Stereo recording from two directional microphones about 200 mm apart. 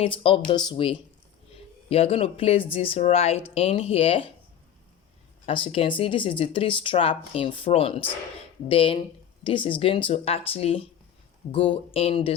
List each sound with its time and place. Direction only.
0.0 s speech: 25° left (ahead or behind)
5.5 s speech: 25° left (ahead or behind)